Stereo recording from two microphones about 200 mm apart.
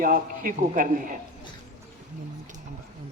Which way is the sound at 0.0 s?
45° right (ahead or behind).